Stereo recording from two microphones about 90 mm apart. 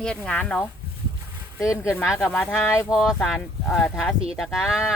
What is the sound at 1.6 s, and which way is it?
Speech, 35° left (ahead or behind).